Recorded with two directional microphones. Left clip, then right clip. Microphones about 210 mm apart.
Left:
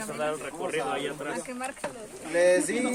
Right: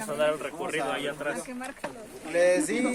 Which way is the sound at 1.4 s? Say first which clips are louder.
Left 3 dB; 55° left (ahead or behind).